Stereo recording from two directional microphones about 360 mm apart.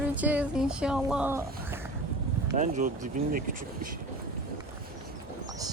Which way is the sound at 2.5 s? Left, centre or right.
Right.